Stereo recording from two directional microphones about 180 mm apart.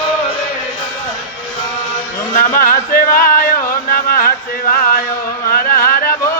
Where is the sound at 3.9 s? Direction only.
55° left (ahead or behind).